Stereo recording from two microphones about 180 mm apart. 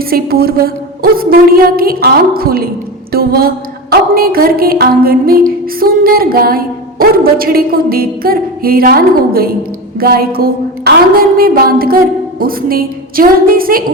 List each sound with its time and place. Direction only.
0.0 s a woman's voice: 55° right (ahead or behind)